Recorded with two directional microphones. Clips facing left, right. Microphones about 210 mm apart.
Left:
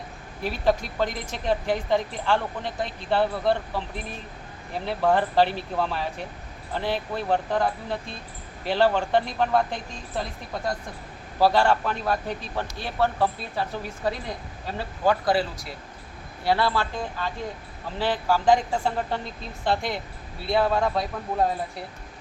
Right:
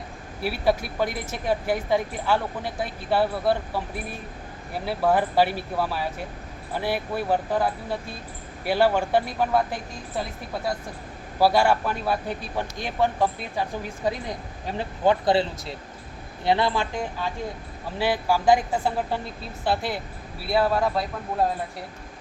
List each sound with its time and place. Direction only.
0.4 s a woman's voice: 10° right (ahead or behind)